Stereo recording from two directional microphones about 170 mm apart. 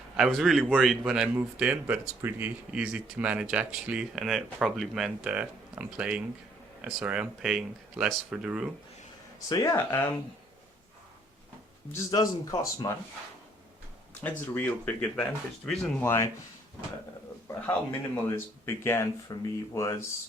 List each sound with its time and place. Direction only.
0.2 s a man's voice: centre (ahead or behind)
9.5 s speech: 20° left (ahead or behind)
11.9 s speech: 20° left (ahead or behind)
14.2 s speech: 10° left (ahead or behind)
16.0 s speech: 15° left (ahead or behind)
18.2 s speech: 15° left (ahead or behind)